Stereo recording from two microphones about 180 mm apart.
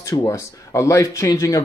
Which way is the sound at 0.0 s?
15° left (ahead or behind).